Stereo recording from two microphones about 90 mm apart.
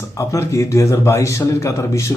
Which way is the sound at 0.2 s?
35° left (ahead or behind).